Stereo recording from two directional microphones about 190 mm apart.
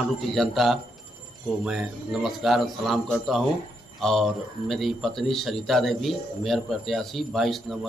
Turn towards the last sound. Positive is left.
turn(degrees=0)  # may be behind; listen again after turning